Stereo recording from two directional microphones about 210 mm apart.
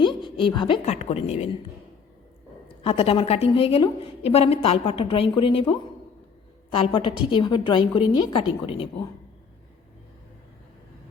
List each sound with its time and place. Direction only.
0.0 s a woman's voice: 25° left (ahead or behind)
2.8 s a woman's voice: 25° left (ahead or behind)
6.7 s a woman's voice: 25° left (ahead or behind)